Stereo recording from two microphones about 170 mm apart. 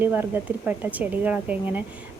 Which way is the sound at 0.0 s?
10° right (ahead or behind).